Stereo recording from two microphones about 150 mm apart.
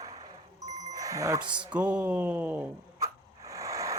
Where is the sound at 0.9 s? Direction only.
20° right (ahead or behind).